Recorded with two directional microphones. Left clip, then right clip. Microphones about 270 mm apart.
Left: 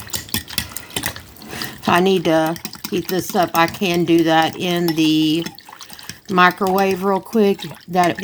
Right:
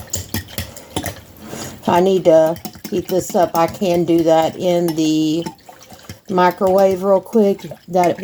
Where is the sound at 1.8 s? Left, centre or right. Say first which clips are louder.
Right 3 dB; left.